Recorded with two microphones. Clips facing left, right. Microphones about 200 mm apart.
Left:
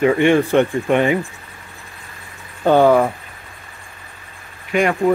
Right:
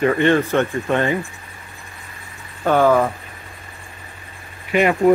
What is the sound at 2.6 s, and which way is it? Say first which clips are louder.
Speech: left 3 dB; 20° left (ahead or behind).